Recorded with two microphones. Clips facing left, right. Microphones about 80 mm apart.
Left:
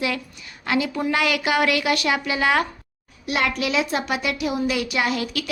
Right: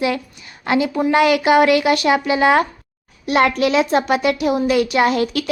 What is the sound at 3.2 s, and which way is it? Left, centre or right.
A woman's voice, right.